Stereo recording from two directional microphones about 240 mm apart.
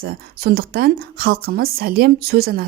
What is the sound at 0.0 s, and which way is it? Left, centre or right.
Speech, right.